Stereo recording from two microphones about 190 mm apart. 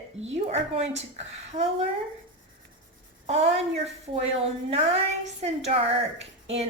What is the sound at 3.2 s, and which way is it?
Speech, 35° right (ahead or behind).